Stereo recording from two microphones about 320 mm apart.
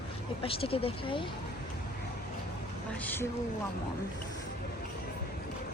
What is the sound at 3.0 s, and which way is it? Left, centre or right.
Speech, centre.